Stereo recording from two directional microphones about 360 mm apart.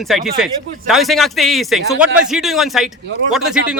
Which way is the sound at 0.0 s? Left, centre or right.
Centre.